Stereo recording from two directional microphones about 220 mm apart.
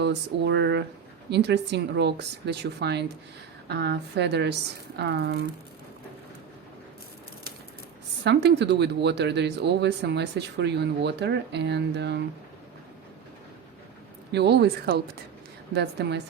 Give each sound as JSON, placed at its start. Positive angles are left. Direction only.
{"t": 0.0, "sound": "speech", "side_deg": -50}
{"t": 8.2, "sound": "speech", "side_deg": -50}
{"t": 14.3, "sound": "speech", "side_deg": -50}